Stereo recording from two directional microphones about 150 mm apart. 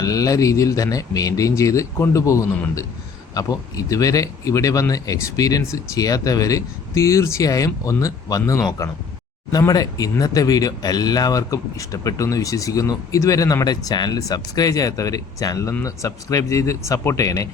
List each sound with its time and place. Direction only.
0.0 s speech: 25° left (ahead or behind)